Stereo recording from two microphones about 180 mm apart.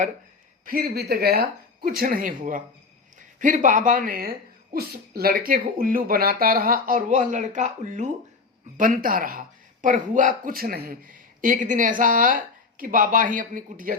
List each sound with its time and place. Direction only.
0.6 s speech: 55° right (ahead or behind)